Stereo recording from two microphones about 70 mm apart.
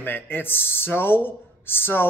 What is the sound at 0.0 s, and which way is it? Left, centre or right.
Speech, left.